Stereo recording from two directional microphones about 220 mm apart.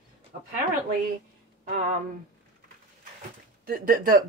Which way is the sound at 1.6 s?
35° right (ahead or behind).